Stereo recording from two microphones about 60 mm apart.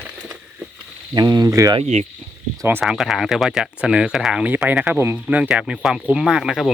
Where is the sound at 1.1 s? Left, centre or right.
Right.